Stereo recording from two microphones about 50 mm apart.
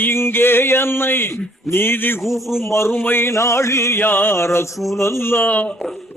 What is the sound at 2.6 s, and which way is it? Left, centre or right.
Speech, left.